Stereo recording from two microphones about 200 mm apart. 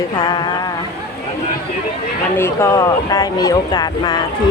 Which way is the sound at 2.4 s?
15° left (ahead or behind).